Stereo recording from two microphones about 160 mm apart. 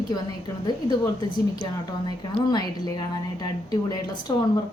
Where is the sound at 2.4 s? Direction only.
25° left (ahead or behind).